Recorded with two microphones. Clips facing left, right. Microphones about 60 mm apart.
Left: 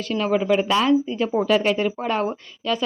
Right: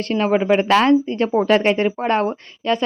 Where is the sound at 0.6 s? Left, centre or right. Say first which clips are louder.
Right 4 dB; right.